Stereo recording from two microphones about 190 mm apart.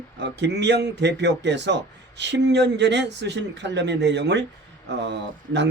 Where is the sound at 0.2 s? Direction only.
65° right (ahead or behind).